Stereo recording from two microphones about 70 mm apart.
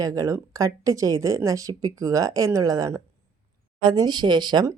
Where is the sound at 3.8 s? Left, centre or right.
Right.